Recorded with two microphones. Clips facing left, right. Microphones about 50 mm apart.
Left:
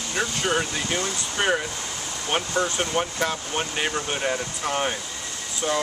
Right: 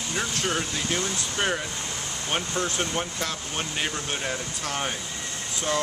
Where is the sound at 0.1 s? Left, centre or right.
Centre.